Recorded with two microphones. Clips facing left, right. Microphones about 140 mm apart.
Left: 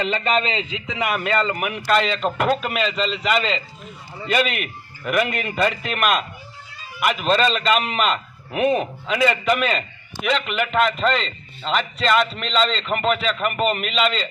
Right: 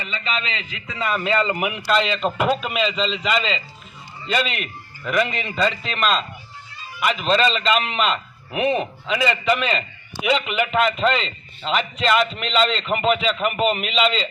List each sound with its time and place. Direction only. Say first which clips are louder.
0.1 s a man's voice: left 6 dB; 45° left (ahead or behind)
0.9 s a man's voice: even; 15° left (ahead or behind)
1.2 s a man's voice: right 2 dB; centre (ahead or behind)
1.5 s a man's voice: right 1 dB; 15° right (ahead or behind)
1.9 s a man's voice: left 1 dB; centre (ahead or behind)